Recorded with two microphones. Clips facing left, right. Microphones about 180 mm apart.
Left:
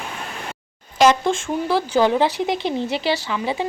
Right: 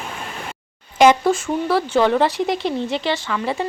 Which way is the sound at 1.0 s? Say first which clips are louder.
Right 2 dB; 10° right (ahead or behind).